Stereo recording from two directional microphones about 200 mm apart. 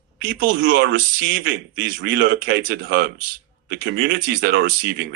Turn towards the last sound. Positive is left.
turn(degrees=-55)  # may be behind; listen again after turning